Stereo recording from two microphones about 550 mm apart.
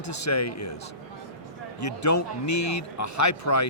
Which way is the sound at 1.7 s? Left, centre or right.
Left.